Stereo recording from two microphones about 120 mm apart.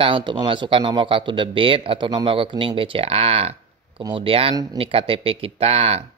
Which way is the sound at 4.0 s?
35° right (ahead or behind).